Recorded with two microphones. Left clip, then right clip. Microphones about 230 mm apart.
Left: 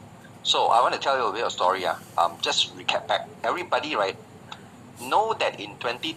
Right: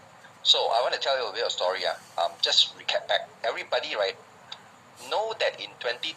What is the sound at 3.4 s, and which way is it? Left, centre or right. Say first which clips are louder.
Speech: left 3 dB; centre.